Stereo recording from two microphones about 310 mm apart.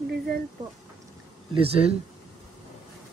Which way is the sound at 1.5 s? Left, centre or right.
Centre.